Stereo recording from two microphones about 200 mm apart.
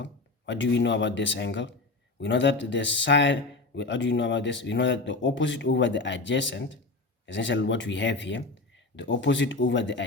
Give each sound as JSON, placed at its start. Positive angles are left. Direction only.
{"t": 0.0, "sound": "speech", "side_deg": 65}